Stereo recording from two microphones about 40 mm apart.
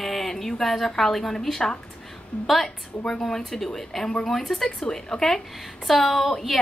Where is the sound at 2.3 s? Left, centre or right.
Left.